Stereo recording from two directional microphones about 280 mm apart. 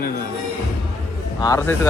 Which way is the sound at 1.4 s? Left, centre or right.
Centre.